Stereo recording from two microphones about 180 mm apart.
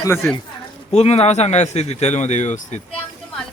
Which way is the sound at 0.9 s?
35° left (ahead or behind).